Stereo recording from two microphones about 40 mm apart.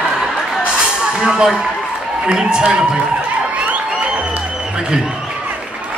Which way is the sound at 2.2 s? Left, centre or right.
Right.